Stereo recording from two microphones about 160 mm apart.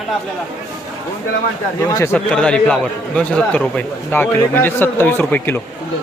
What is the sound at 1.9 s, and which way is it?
Speech, 15° left (ahead or behind).